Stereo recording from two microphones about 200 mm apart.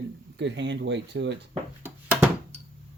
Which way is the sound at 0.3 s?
60° right (ahead or behind).